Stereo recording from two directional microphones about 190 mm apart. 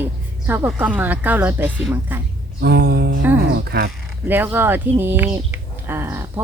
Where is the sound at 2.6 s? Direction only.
55° right (ahead or behind).